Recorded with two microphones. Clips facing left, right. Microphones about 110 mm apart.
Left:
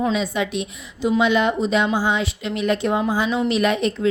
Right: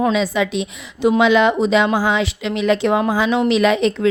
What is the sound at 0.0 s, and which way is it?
A woman's voice, 90° right.